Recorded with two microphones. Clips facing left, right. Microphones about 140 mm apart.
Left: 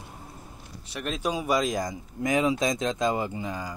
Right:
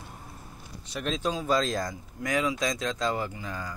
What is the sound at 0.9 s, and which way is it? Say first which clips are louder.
Speech: even; 5° left (ahead or behind).